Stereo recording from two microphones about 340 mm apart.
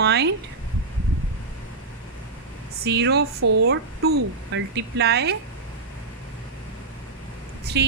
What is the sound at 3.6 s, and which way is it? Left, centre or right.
A woman's voice, right.